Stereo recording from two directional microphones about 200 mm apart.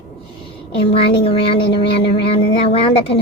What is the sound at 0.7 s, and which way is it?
A woman's voice, 30° left (ahead or behind).